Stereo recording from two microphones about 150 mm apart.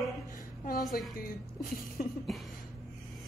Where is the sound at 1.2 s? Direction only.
75° left (ahead or behind).